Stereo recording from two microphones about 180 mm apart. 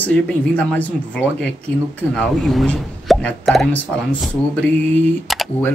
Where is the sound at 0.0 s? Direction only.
10° left (ahead or behind).